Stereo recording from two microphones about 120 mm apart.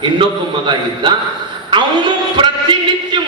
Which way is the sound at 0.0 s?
40° right (ahead or behind).